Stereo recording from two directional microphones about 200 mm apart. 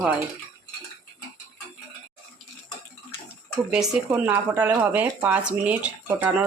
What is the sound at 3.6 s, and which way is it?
Speech, 5° right (ahead or behind).